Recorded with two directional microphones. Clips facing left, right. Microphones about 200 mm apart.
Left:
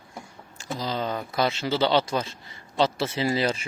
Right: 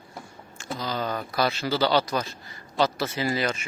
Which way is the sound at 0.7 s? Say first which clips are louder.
Left 1 dB; 25° left (ahead or behind).